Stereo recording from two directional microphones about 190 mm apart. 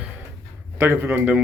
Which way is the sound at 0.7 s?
10° right (ahead or behind).